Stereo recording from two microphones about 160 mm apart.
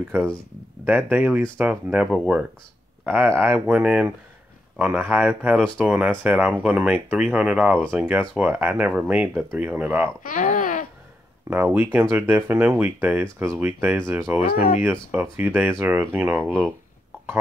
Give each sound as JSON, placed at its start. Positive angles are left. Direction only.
{"t": 0.8, "sound": "speech", "side_deg": -10}
{"t": 10.2, "sound": "a sound", "side_deg": 55}
{"t": 11.5, "sound": "speech", "side_deg": -15}